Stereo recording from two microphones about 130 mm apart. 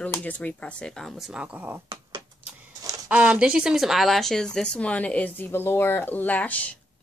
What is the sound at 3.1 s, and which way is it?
Speech, 10° right (ahead or behind).